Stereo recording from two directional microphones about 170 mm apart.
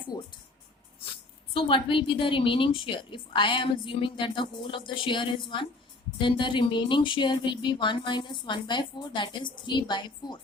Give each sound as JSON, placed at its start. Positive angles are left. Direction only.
{"t": 0.1, "sound": "speech", "side_deg": 25}
{"t": 1.5, "sound": "speech", "side_deg": 30}